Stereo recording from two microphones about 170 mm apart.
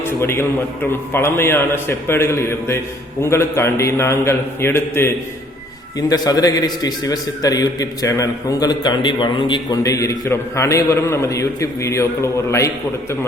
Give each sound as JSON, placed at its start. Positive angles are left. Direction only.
{"t": 0.0, "sound": "a man's voice", "side_deg": 15}